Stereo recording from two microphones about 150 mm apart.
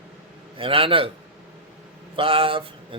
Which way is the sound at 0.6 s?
35° right (ahead or behind).